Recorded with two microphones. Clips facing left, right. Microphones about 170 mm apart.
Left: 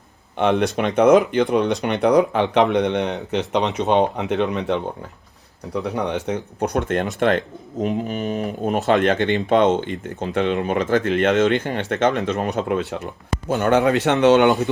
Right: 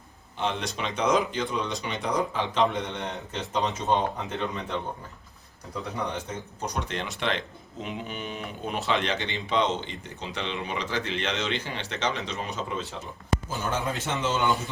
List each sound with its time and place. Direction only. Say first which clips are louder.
0.3 s speech: left 11 dB; 60° left (ahead or behind)